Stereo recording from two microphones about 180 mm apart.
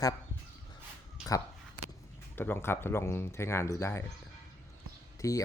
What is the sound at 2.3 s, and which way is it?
Speech, 10° left (ahead or behind).